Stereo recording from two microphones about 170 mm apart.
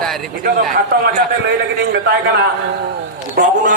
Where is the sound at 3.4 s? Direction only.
65° right (ahead or behind).